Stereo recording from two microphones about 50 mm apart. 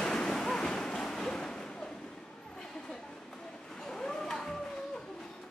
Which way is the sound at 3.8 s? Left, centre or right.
Centre.